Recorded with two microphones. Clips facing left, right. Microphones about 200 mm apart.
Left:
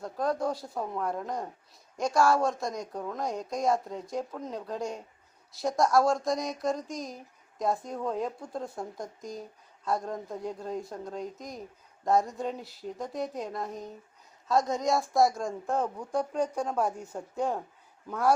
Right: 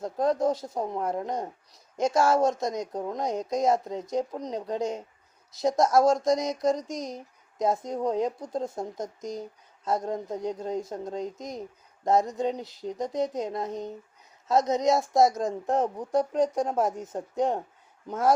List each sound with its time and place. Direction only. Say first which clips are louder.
0.0 s a woman's voice: right 5 dB; 20° right (ahead or behind)
18.1 s speech: right 2 dB; 20° right (ahead or behind)